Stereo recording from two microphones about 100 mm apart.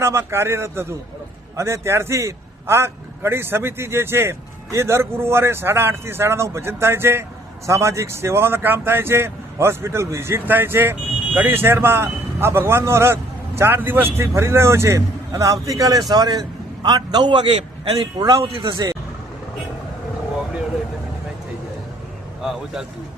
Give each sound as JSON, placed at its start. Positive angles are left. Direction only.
{"t": 0.0, "sound": "a man's voice", "side_deg": -25}
{"t": 18.2, "sound": "a man's voice", "side_deg": -35}
{"t": 18.4, "sound": "speech", "side_deg": -65}
{"t": 22.4, "sound": "a man's voice", "side_deg": -5}